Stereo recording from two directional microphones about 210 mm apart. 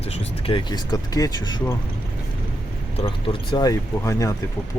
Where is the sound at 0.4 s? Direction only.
25° left (ahead or behind).